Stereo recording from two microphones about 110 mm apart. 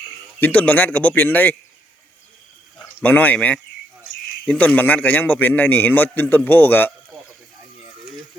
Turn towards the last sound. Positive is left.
turn(degrees=20)  # may be behind; listen again after turning